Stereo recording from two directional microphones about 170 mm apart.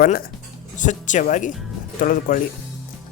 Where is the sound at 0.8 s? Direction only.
45° left (ahead or behind).